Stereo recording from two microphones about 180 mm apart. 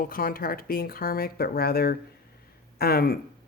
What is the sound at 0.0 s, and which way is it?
Speech, 55° left (ahead or behind).